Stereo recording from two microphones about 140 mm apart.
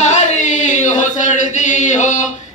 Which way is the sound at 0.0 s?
60° left (ahead or behind).